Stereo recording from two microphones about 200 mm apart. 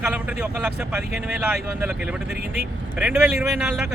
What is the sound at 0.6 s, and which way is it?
Speech, 5° right (ahead or behind).